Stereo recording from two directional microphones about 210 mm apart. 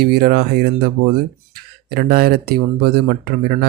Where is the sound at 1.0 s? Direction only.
75° right (ahead or behind).